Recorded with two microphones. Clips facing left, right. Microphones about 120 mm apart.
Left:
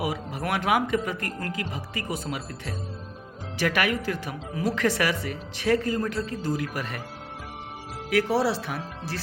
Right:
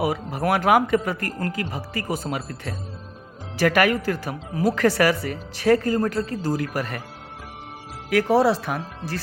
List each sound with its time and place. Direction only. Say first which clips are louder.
0.0 s a woman's voice: right 6 dB; 40° right (ahead or behind)
8.1 s speech: right 5 dB; 45° right (ahead or behind)